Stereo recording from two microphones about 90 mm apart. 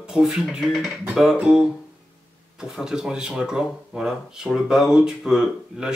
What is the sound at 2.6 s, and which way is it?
Speech, 5° right (ahead or behind).